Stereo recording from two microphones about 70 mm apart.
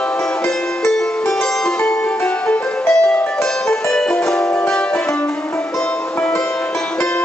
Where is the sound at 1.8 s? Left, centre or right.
Centre.